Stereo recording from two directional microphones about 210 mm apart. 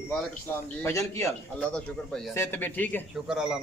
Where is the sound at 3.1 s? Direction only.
5° right (ahead or behind).